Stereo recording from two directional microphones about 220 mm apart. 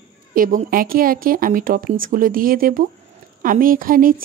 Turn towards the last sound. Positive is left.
turn(degrees=-40)  # may be behind; listen again after turning